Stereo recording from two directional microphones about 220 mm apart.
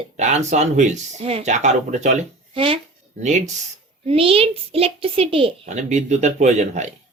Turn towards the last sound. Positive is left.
turn(degrees=-30)  # may be behind; listen again after turning